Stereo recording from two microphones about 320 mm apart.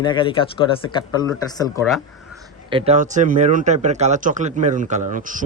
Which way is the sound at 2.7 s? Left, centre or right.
Centre.